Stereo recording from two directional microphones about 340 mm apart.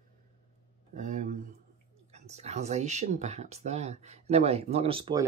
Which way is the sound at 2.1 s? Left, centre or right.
Centre.